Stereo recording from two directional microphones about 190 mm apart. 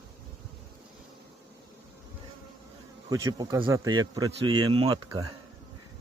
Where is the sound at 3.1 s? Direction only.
20° right (ahead or behind).